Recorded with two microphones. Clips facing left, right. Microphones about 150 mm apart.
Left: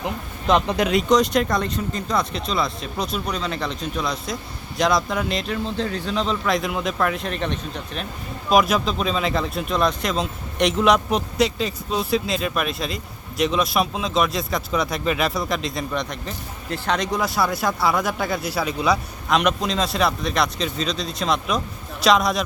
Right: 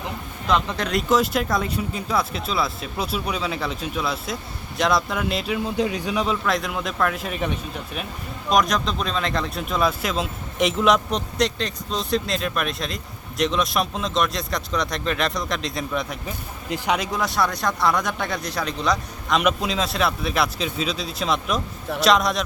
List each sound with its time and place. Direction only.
0.0 s speech: 20° left (ahead or behind)
0.9 s speech: centre (ahead or behind)
6.4 s speech: centre (ahead or behind)
8.4 s speech: 5° left (ahead or behind)